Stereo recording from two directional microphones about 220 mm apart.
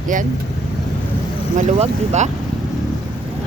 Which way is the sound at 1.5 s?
30° right (ahead or behind).